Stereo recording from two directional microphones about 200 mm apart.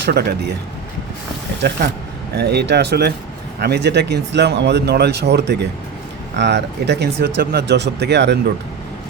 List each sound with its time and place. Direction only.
0.0 s speech: 55° right (ahead or behind)
1.6 s speech: 50° right (ahead or behind)